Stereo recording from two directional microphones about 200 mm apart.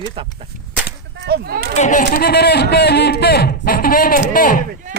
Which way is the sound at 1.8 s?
40° left (ahead or behind).